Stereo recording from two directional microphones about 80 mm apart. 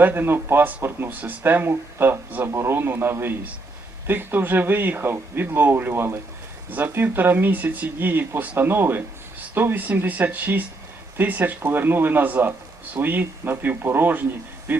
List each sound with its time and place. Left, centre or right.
0.0 s speech: right